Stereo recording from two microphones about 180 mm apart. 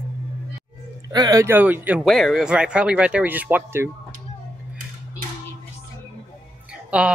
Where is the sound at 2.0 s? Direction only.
Centre (ahead or behind).